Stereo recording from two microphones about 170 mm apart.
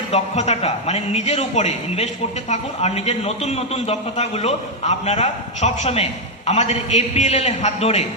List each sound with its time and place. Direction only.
0.1 s a man's voice: 40° left (ahead or behind)